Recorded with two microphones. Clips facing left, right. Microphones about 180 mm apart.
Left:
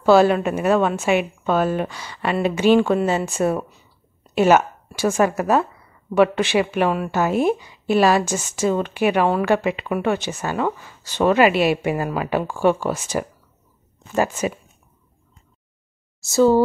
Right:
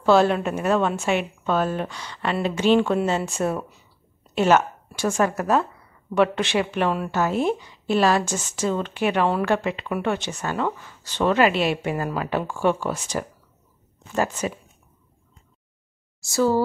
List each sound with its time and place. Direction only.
0.0 s a woman's voice: 5° left (ahead or behind)
16.3 s speech: 25° left (ahead or behind)